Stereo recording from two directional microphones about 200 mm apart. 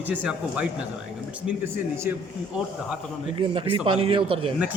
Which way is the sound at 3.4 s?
25° right (ahead or behind).